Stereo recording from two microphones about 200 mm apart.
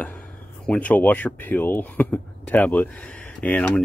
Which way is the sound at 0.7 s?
5° left (ahead or behind).